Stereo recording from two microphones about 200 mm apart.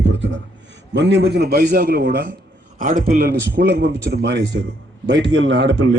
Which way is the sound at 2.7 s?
40° right (ahead or behind).